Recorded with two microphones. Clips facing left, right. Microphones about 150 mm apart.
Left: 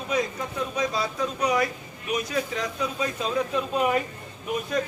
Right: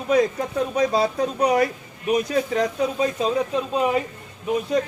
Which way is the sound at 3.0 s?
30° right (ahead or behind).